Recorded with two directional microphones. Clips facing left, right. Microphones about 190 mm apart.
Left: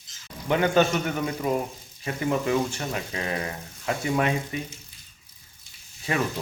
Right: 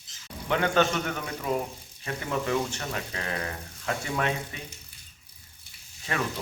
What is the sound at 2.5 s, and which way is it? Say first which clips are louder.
Speech: left 3 dB; 10° left (ahead or behind).